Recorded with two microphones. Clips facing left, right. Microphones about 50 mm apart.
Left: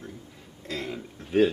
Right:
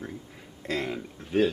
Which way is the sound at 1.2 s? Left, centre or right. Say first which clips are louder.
Left 3 dB; centre.